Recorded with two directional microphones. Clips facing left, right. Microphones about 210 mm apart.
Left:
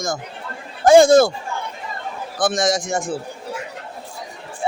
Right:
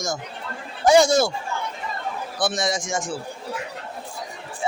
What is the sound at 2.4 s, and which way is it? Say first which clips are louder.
Speech: left 5 dB; 50° left (ahead or behind).